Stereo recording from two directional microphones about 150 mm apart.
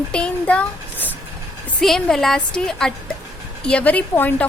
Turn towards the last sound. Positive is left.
turn(degrees=10)  # may be behind; listen again after turning